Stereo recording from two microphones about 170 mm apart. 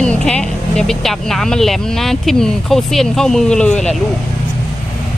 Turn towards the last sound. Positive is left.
turn(degrees=5)  # may be behind; listen again after turning